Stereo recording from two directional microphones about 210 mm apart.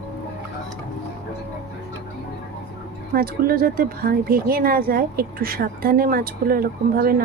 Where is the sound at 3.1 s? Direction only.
45° right (ahead or behind).